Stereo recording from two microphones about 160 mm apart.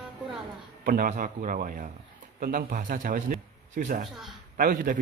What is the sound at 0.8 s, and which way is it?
A man's voice, 60° right (ahead or behind).